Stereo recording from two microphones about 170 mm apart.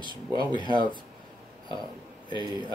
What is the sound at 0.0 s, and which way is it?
Speech, 25° right (ahead or behind).